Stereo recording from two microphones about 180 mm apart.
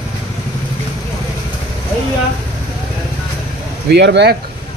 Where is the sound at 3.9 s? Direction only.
70° right (ahead or behind).